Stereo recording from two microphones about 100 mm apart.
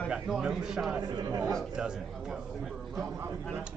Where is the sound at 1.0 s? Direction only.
40° right (ahead or behind).